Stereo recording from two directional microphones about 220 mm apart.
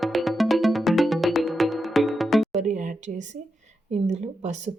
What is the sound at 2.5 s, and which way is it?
A woman's voice, 35° right (ahead or behind).